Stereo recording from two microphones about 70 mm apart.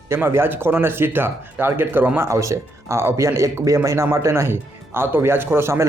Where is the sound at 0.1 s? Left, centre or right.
Right.